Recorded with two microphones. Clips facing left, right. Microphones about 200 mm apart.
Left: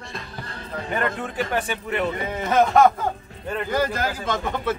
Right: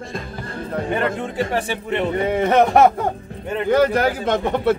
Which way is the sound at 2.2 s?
65° right (ahead or behind).